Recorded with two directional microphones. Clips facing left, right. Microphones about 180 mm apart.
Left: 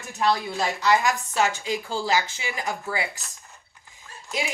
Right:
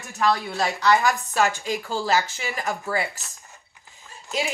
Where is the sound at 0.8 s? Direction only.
20° left (ahead or behind).